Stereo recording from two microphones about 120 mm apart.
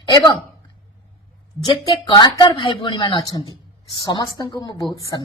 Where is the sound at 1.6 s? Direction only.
40° left (ahead or behind).